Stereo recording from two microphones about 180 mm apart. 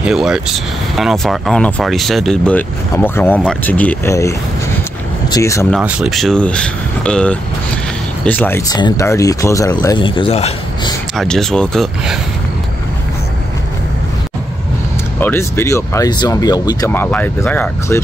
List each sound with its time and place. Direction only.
0.0 s speech: 5° right (ahead or behind); by 4.3 s 15° left (ahead or behind)
5.3 s speech: 15° left (ahead or behind)
5.7 s speech: 5° right (ahead or behind); by 10.5 s 35° left (ahead or behind)
11.1 s speech: 5° left (ahead or behind)
15.1 s speech: 10° left (ahead or behind)